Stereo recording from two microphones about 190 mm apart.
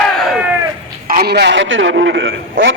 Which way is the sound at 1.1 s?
60° right (ahead or behind).